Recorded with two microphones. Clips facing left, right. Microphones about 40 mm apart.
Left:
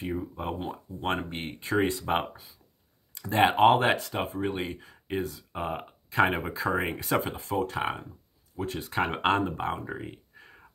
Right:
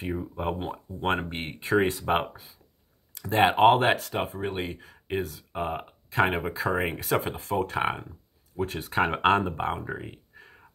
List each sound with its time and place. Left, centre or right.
0.4 s speech: right
1.9 s speech: centre
7.8 s speech: right
8.5 s speech: centre